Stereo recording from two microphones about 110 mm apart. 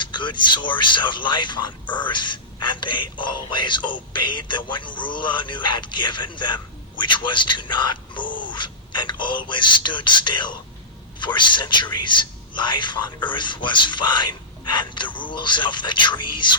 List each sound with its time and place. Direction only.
0.0 s speech: 45° left (ahead or behind)